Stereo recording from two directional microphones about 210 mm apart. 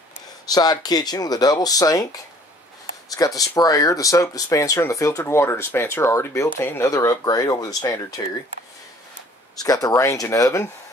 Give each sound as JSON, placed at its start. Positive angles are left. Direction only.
{"t": 0.5, "sound": "speech", "side_deg": 20}
{"t": 9.6, "sound": "speech", "side_deg": 15}